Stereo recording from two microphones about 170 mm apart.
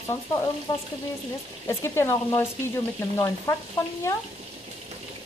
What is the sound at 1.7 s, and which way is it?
Frying, 15° left (ahead or behind).